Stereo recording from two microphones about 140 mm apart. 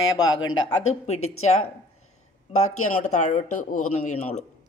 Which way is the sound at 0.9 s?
50° left (ahead or behind).